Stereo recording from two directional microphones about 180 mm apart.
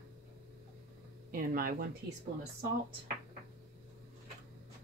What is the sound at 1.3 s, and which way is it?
Speech, 55° right (ahead or behind).